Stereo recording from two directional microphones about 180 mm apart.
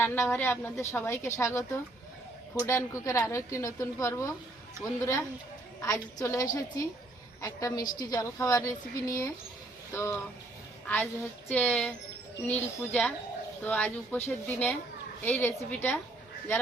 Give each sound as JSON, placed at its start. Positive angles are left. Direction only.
{"t": 0.0, "sound": "a woman's voice", "side_deg": 10}